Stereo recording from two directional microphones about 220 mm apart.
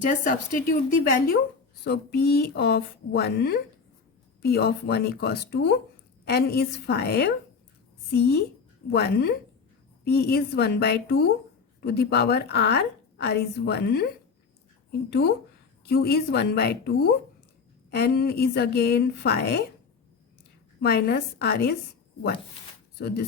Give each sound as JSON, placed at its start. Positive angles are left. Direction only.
{"t": 1.0, "sound": "speech", "side_deg": 40}
{"t": 15.1, "sound": "speech", "side_deg": 45}
{"t": 20.8, "sound": "speech", "side_deg": 45}
{"t": 23.0, "sound": "speech", "side_deg": 50}